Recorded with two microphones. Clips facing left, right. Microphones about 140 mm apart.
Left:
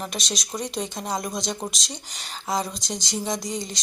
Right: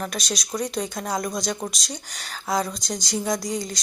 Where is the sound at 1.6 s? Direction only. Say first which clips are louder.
Right 1 dB; 10° left (ahead or behind).